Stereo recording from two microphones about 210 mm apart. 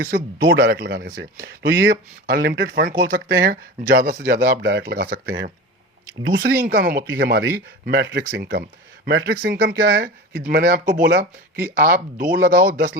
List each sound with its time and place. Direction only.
0.0 s speech: 40° right (ahead or behind)
6.6 s speech: 40° right (ahead or behind)